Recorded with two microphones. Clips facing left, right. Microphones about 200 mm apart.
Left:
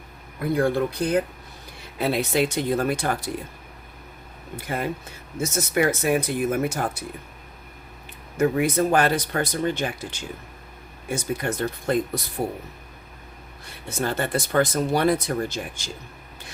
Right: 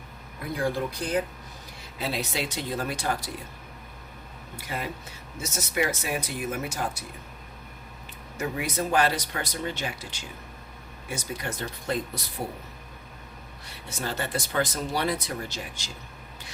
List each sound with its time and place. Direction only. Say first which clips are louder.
0.5 s speech: left 6 dB; 60° left (ahead or behind)
4.5 s speech: left 6 dB; 50° left (ahead or behind)
8.4 s speech: left 9 dB; 55° left (ahead or behind)
14.0 s speech: left 6 dB; 55° left (ahead or behind)